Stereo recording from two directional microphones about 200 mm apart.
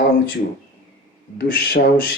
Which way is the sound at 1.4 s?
55° left (ahead or behind).